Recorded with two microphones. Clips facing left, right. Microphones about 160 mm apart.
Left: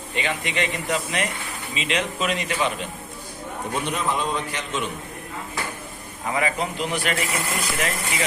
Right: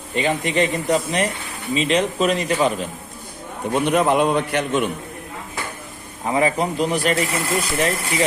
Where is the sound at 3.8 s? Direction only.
60° right (ahead or behind).